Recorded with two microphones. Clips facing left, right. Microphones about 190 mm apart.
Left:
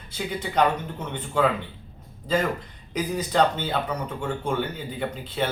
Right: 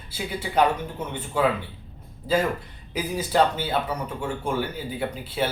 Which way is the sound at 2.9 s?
5° right (ahead or behind).